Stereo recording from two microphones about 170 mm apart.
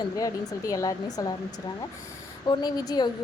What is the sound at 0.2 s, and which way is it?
Speech, 20° left (ahead or behind).